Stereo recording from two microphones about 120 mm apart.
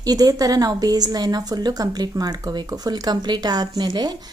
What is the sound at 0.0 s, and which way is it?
A woman's voice, 30° right (ahead or behind).